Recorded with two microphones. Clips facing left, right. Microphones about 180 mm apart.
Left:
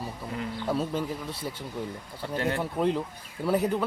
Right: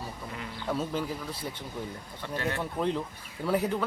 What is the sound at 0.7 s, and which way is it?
Speech, centre (ahead or behind).